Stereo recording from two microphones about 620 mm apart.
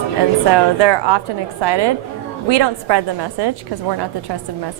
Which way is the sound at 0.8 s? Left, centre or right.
Right.